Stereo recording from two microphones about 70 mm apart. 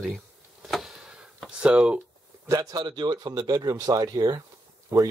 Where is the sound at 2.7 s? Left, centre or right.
Right.